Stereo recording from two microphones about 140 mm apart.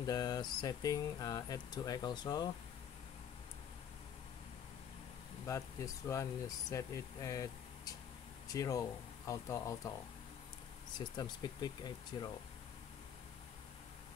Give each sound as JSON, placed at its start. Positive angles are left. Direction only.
{"t": 0.0, "sound": "speech", "side_deg": 25}
{"t": 5.5, "sound": "speech", "side_deg": 20}
{"t": 11.1, "sound": "speech", "side_deg": 30}